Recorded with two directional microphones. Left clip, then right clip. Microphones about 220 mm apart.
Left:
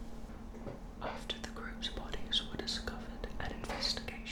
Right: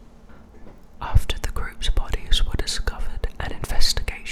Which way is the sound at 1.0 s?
50° right (ahead or behind).